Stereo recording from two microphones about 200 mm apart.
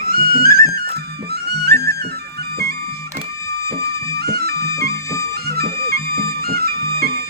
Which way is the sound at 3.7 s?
50° right (ahead or behind).